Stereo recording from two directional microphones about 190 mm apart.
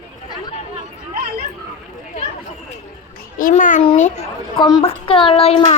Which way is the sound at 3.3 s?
45° left (ahead or behind).